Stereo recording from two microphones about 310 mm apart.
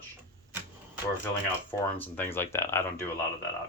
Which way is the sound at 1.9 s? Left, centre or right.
Centre.